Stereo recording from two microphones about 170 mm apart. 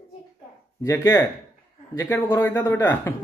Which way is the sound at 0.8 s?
15° left (ahead or behind).